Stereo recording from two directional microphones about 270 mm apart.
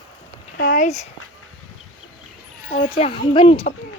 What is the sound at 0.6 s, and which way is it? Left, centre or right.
Speech, left.